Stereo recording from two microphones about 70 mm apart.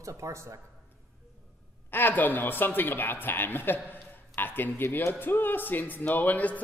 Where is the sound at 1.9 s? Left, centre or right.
Left.